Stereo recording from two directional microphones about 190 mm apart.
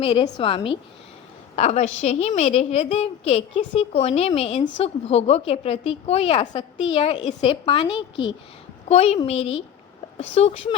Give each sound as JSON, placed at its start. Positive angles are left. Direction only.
{"t": 0.0, "sound": "a woman's voice", "side_deg": 30}